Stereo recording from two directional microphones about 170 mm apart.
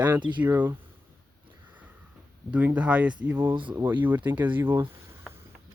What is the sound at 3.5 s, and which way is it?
Speech, 30° right (ahead or behind).